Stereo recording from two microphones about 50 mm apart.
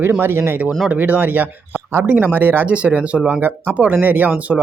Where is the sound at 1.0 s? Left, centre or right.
Right.